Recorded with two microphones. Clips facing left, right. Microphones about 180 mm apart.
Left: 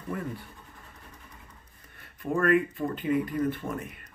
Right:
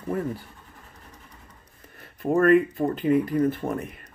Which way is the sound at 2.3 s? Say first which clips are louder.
Right 6 dB; 40° right (ahead or behind).